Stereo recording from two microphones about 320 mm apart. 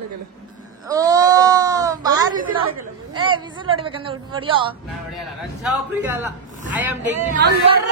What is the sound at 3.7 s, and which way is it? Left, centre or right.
A woman's voice, centre.